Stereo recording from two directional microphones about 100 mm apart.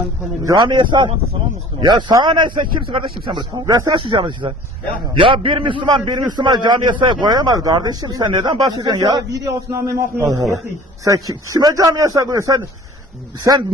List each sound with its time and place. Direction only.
0.4 s a man's voice: 35° right (ahead or behind)
0.7 s a man's voice: 50° right (ahead or behind)
3.3 s a man's voice: 35° right (ahead or behind)
3.9 s a man's voice: 55° right (ahead or behind)
8.6 s a man's voice: 40° right (ahead or behind)